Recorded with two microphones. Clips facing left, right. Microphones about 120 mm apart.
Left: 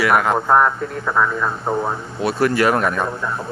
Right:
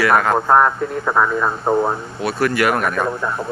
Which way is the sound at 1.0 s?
10° right (ahead or behind).